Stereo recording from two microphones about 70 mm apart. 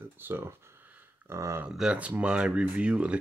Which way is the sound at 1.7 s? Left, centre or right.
Centre.